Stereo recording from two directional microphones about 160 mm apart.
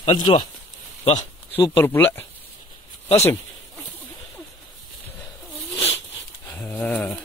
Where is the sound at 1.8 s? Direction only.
15° left (ahead or behind).